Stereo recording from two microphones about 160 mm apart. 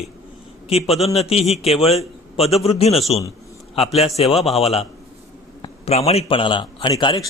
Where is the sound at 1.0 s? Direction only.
40° left (ahead or behind).